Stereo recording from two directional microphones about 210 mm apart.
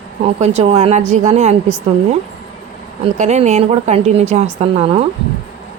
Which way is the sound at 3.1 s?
30° right (ahead or behind).